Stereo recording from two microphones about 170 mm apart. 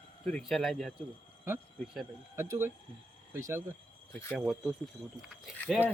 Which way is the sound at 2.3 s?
15° right (ahead or behind).